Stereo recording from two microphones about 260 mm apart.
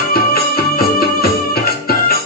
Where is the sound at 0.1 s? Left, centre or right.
Left.